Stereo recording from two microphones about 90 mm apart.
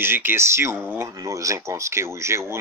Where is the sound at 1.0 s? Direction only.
35° right (ahead or behind).